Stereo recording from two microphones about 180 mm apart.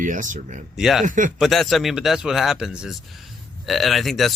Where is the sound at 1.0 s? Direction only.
45° right (ahead or behind).